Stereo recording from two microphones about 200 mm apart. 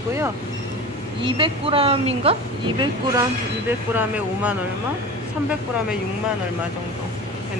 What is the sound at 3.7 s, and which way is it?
Speech, 10° right (ahead or behind).